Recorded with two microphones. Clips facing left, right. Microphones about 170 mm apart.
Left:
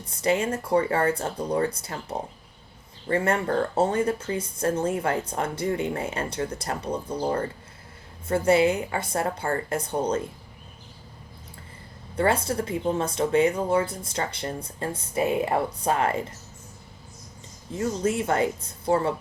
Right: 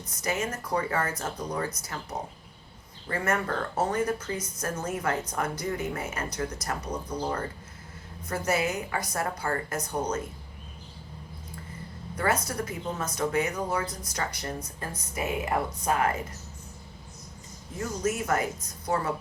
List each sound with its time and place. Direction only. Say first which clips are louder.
0.2 s a woman's voice: left 7 dB; 30° left (ahead or behind)
12.1 s a woman's voice: left 5 dB; 30° left (ahead or behind)
18.0 s a woman's voice: left 3 dB; 30° left (ahead or behind)